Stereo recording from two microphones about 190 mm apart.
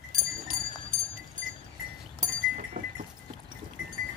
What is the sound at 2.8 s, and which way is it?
Goat, 45° right (ahead or behind).